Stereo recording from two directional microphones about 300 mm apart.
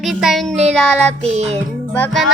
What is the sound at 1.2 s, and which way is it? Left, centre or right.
Music, right.